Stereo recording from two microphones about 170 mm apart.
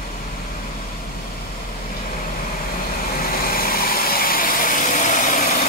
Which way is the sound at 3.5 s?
60° left (ahead or behind).